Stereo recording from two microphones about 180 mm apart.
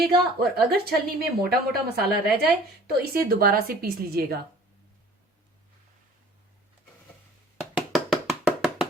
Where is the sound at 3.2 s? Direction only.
55° right (ahead or behind).